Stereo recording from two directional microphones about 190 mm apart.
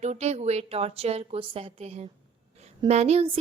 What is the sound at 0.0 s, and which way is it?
A woman's voice, 35° right (ahead or behind).